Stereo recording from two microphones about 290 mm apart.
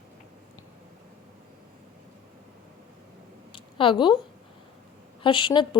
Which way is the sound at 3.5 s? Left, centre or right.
Centre.